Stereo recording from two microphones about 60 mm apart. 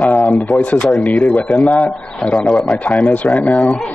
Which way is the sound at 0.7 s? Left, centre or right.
Centre.